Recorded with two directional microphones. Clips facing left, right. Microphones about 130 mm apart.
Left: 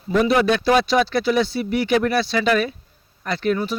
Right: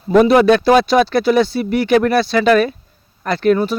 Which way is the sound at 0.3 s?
55° right (ahead or behind).